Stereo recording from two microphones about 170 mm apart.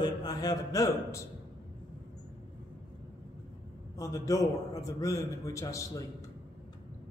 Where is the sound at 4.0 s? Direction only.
20° left (ahead or behind).